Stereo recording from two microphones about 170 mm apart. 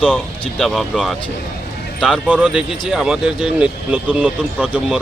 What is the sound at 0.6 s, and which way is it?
Speech, centre (ahead or behind).